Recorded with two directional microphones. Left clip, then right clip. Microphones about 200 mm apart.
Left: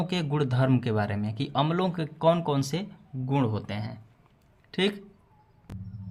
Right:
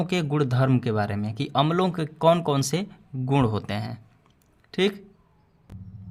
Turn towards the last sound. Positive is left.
turn(degrees=0)  # may be behind; listen again after turning